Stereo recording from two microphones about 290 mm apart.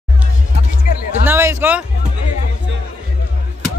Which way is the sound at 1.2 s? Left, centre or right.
Centre.